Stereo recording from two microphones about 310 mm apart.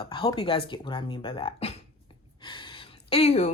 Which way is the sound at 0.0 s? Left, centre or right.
Centre.